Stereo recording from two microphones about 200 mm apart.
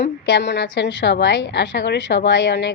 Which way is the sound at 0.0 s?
60° left (ahead or behind).